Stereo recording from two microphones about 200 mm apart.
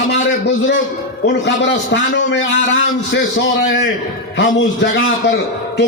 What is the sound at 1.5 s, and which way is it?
A man's voice, 60° left (ahead or behind).